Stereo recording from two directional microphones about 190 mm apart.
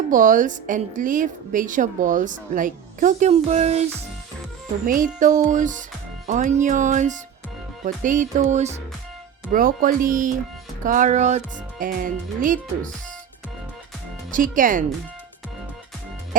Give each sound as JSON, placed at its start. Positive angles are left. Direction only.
{"t": 0.1, "sound": "a woman's voice", "side_deg": -45}
{"t": 5.2, "sound": "a woman's voice", "side_deg": -40}
{"t": 14.5, "sound": "a woman's voice", "side_deg": -45}
{"t": 16.3, "sound": "music", "side_deg": -45}